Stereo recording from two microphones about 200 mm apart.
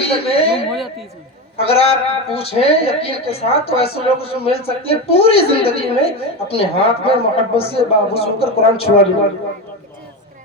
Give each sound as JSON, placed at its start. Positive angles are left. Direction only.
{"t": 0.0, "sound": "speech", "side_deg": 30}
{"t": 0.7, "sound": "speech", "side_deg": 0}
{"t": 1.5, "sound": "speech", "side_deg": 30}